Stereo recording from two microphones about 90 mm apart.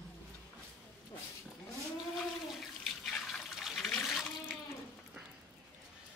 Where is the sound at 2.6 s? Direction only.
5° left (ahead or behind).